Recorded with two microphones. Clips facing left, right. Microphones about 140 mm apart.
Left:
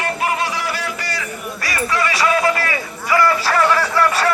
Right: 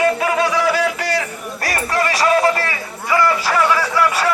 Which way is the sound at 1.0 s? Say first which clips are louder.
Right 7 dB; 90° right.